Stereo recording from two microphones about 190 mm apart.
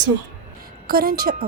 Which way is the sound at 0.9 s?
50° right (ahead or behind).